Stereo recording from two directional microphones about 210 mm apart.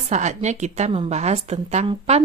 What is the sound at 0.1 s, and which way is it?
A woman's voice, 35° right (ahead or behind).